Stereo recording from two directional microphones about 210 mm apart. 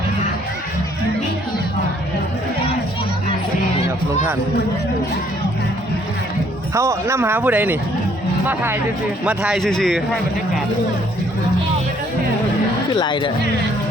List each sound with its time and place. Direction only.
6.7 s a man's voice: 15° right (ahead or behind)
12.9 s speech: 20° left (ahead or behind)